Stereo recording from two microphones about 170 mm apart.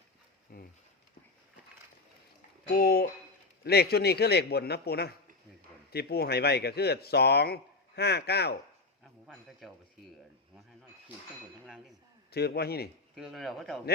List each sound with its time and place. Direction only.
0.5 s a sound: 60° left (ahead or behind)
2.7 s speech: 60° left (ahead or behind)
9.2 s speech: centre (ahead or behind)
11.6 s speech: centre (ahead or behind)
12.3 s speech: 70° left (ahead or behind)
13.1 s speech: centre (ahead or behind)